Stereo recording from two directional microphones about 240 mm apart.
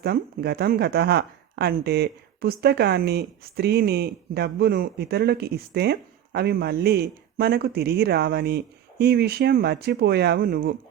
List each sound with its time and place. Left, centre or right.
0.0 s speech: right